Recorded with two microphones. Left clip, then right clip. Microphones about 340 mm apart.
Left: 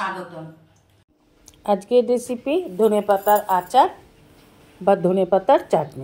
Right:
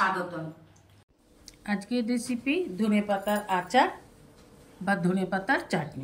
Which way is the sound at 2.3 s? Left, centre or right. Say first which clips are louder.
Left 6 dB; left.